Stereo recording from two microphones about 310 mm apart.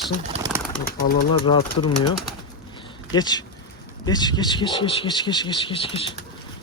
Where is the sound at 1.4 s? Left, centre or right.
Centre.